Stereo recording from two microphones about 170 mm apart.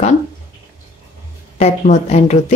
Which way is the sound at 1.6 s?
40° left (ahead or behind).